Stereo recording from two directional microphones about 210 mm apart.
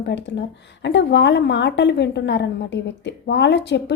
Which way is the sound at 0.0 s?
55° left (ahead or behind).